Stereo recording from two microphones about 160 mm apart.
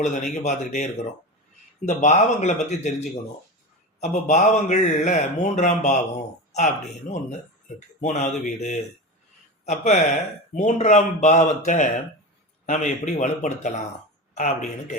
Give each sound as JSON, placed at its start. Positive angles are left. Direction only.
{"t": 0.0, "sound": "speech", "side_deg": 50}
{"t": 8.0, "sound": "speech", "side_deg": 50}